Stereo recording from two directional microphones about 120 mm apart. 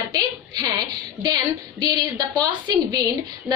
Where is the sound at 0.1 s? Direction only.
35° right (ahead or behind).